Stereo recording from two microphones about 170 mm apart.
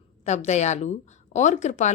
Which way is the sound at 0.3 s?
40° left (ahead or behind).